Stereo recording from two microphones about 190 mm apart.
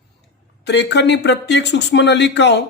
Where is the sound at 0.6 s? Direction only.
65° left (ahead or behind).